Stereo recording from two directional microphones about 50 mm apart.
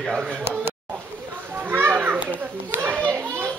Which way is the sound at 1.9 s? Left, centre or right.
Right.